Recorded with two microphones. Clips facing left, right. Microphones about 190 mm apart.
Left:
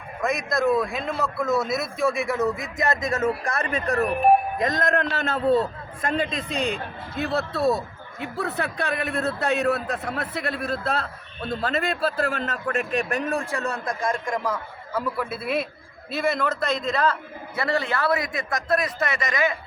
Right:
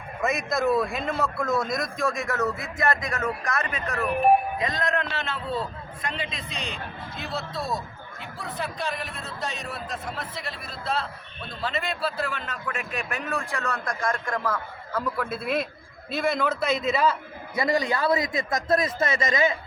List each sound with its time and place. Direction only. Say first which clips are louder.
0.2 s a man's voice: left 2 dB; centre (ahead or behind); by 4.1 s 35° left (ahead or behind)
4.5 s a man's voice: left 4 dB; 45° left (ahead or behind)
13.7 s a man's voice: left 2 dB; 20° left (ahead or behind); by 19.5 s 20° right (ahead or behind)